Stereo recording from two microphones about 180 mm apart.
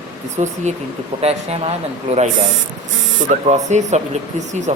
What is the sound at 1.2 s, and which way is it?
Speech, 35° right (ahead or behind).